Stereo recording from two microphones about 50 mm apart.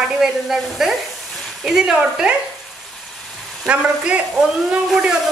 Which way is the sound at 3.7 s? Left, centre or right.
Right.